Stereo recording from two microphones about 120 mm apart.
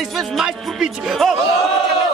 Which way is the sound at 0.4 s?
5° right (ahead or behind).